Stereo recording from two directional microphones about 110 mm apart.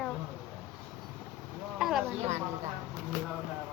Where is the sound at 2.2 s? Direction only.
85° right.